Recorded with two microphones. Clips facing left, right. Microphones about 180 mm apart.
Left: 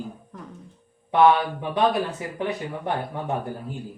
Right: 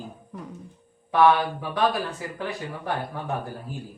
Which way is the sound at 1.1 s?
20° left (ahead or behind).